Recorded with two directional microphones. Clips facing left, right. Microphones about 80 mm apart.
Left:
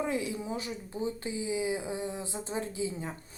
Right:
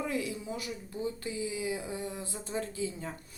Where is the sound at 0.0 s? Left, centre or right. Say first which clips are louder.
Left 2 dB; left.